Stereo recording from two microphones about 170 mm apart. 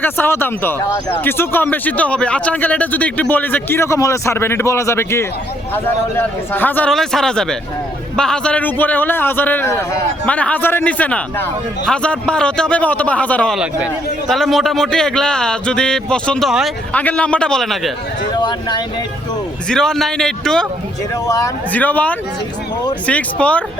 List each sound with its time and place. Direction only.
0.0 s speech: 10° left (ahead or behind)
13.6 s a man's voice: 5° right (ahead or behind)
18.3 s speech: 25° left (ahead or behind)
19.6 s a man's voice: 5° left (ahead or behind)
21.2 s speech: 20° left (ahead or behind)
21.7 s speech: 10° left (ahead or behind)